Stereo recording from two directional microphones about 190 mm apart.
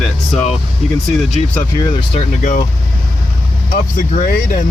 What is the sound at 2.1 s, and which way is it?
Speech, 40° left (ahead or behind).